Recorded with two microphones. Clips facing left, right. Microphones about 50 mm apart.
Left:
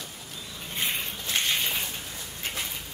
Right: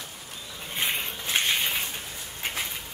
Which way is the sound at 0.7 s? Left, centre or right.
Centre.